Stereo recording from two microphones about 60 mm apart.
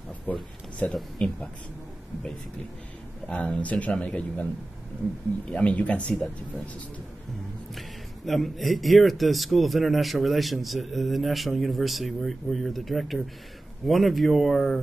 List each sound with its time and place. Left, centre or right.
0.3 s speech: left
3.3 s speech: centre
8.3 s a man's voice: centre